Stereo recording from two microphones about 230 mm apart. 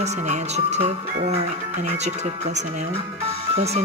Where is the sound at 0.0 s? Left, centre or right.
Right.